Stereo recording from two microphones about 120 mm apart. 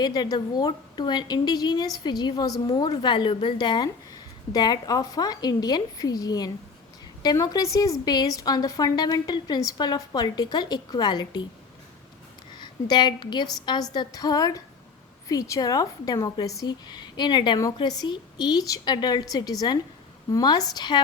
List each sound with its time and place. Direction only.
0.0 s a woman's voice: 35° left (ahead or behind)
12.5 s a woman's voice: 40° left (ahead or behind)